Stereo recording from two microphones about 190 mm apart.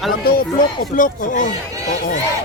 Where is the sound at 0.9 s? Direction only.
45° left (ahead or behind).